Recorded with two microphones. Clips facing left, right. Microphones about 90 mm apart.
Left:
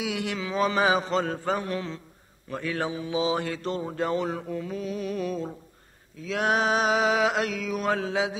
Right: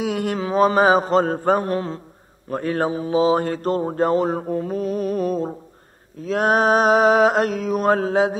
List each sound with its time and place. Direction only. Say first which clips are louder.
0.0 s speech: right 7 dB; 45° right (ahead or behind)